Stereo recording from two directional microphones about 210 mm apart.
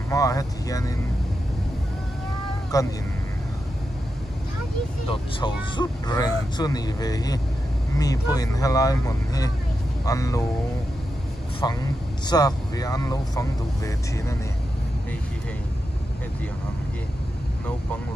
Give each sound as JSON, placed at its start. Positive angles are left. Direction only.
{"t": 0.1, "sound": "speech", "side_deg": 15}
{"t": 2.7, "sound": "speech", "side_deg": 15}
{"t": 5.0, "sound": "speech", "side_deg": 25}
{"t": 11.6, "sound": "speech", "side_deg": 20}